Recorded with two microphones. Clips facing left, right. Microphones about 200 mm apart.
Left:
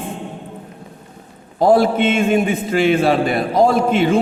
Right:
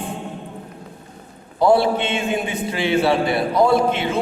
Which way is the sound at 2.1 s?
45° left (ahead or behind).